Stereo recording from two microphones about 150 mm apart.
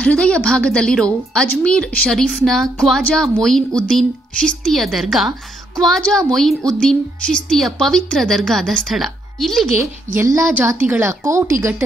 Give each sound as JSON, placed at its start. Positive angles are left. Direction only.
{"t": 0.0, "sound": "a woman's voice", "side_deg": 5}
{"t": 10.1, "sound": "a woman's voice", "side_deg": -20}